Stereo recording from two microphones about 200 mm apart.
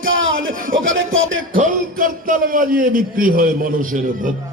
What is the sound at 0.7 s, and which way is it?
Speech, 70° right (ahead or behind).